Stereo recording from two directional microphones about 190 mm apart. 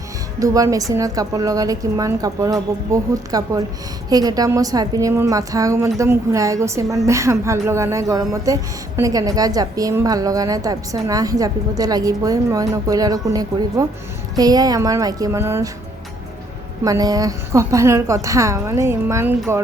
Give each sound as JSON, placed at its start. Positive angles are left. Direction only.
{"t": 0.3, "sound": "a woman's voice", "side_deg": -15}
{"t": 16.8, "sound": "a woman's voice", "side_deg": -20}